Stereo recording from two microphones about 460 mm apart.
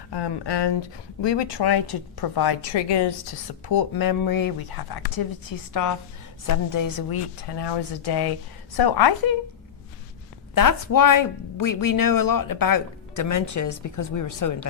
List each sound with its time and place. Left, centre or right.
0.1 s speech: left
10.5 s speech: left